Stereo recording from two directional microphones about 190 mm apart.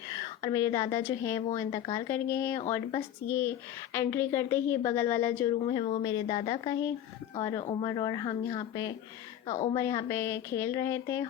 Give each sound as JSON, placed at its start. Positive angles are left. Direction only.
{"t": 0.1, "sound": "a woman's voice", "side_deg": 20}
{"t": 5.6, "sound": "speech", "side_deg": 30}
{"t": 9.5, "sound": "a woman's voice", "side_deg": 35}
{"t": 9.7, "sound": "a woman's voice", "side_deg": 15}